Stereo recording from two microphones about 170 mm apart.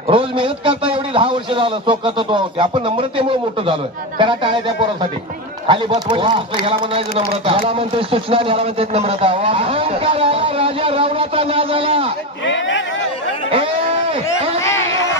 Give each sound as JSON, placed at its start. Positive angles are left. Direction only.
{"t": 0.1, "sound": "a man's voice", "side_deg": -30}
{"t": 5.9, "sound": "a man's voice", "side_deg": -30}
{"t": 12.4, "sound": "speech", "side_deg": 90}
{"t": 13.5, "sound": "a sound", "side_deg": -35}